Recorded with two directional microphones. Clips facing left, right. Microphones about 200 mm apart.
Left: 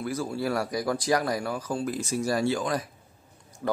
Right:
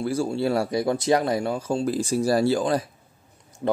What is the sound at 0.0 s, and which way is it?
Speech, 30° right (ahead or behind).